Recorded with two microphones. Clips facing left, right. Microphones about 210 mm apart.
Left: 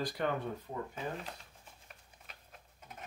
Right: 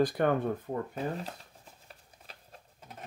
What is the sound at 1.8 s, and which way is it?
Patter, 35° right (ahead or behind).